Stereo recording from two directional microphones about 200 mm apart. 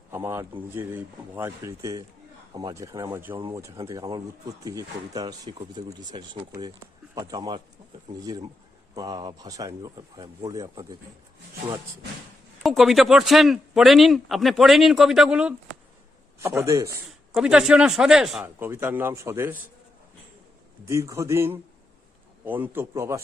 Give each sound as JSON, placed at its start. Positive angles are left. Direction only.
{"t": 0.1, "sound": "a sound", "side_deg": -10}
{"t": 0.8, "sound": "speech", "side_deg": -10}
{"t": 12.6, "sound": "speech", "side_deg": 0}
{"t": 17.1, "sound": "speech", "side_deg": -5}
{"t": 20.8, "sound": "speech", "side_deg": -15}